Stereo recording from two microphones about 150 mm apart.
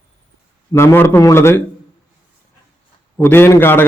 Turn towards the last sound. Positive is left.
turn(degrees=15)  # may be behind; listen again after turning